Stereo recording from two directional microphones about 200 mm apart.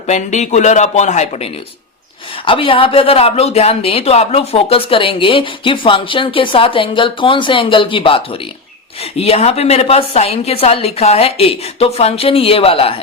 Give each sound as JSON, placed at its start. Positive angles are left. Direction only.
{"t": 0.1, "sound": "speech", "side_deg": 35}